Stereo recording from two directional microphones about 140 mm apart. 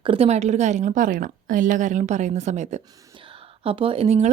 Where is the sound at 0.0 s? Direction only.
40° right (ahead or behind).